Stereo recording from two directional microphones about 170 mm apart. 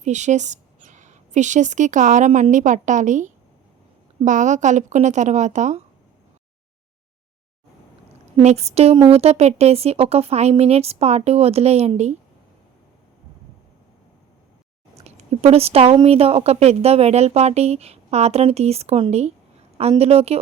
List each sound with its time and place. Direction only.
0.0 s a woman's voice: 45° right (ahead or behind)
8.4 s speech: 40° right (ahead or behind)
15.0 s speech: 40° right (ahead or behind)